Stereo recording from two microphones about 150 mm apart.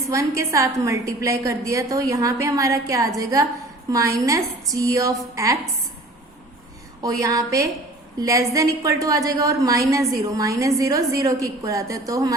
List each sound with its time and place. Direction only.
0.1 s a woman's voice: 20° right (ahead or behind)
7.0 s a woman's voice: 25° right (ahead or behind)